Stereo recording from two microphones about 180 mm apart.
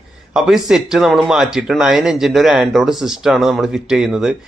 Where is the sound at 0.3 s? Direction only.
5° right (ahead or behind).